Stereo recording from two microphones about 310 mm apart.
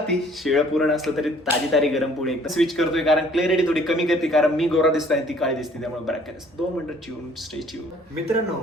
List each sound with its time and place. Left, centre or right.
0.1 s speech: centre